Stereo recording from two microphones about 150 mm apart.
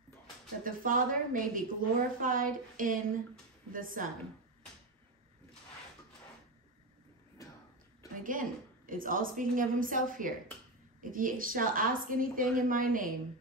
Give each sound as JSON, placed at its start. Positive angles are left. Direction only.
{"t": 0.7, "sound": "a woman's voice", "side_deg": -70}
{"t": 7.4, "sound": "a sound", "side_deg": 20}
{"t": 8.2, "sound": "a woman's voice", "side_deg": -65}